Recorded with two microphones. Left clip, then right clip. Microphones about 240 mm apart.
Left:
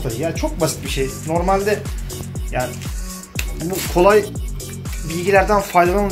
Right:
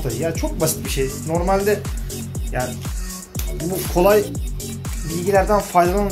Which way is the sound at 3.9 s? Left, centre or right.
Centre.